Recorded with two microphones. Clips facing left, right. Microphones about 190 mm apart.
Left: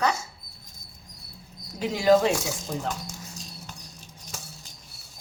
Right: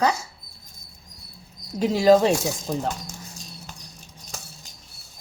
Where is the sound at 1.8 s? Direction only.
40° right (ahead or behind).